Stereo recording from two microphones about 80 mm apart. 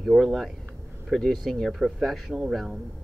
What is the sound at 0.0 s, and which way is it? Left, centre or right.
Speech, centre.